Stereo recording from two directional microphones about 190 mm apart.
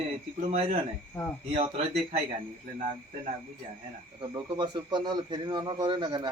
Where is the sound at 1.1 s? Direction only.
15° left (ahead or behind).